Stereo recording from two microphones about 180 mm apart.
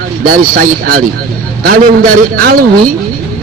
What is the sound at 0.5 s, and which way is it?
A man's voice, 55° right (ahead or behind).